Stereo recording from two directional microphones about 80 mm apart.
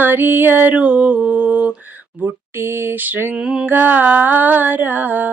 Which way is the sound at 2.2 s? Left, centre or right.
Right.